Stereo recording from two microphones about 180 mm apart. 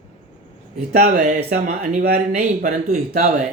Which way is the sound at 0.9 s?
50° right (ahead or behind).